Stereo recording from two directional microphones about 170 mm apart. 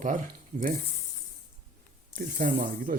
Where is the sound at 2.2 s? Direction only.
50° right (ahead or behind).